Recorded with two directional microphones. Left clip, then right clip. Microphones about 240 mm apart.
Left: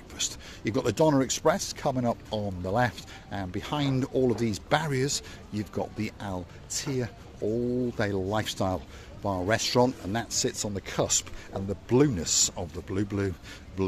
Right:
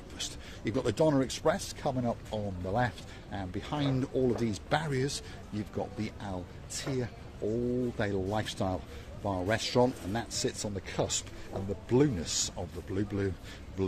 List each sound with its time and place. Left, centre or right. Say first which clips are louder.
0.2 s speech: left 6 dB; left